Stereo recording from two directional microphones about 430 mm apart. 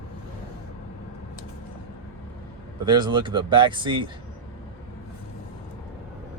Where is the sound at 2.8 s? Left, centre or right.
Centre.